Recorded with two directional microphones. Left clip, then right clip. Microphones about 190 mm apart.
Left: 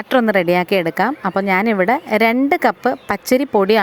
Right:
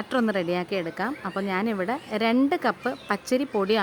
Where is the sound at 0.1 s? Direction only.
35° left (ahead or behind).